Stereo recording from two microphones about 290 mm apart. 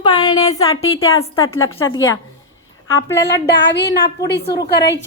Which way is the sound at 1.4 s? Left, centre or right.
Left.